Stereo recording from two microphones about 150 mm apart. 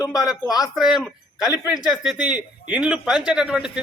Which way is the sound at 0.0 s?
25° left (ahead or behind).